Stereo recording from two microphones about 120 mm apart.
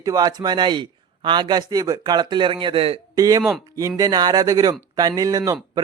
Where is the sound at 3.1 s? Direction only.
30° right (ahead or behind).